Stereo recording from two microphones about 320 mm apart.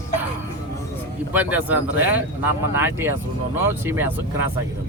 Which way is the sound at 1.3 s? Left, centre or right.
Centre.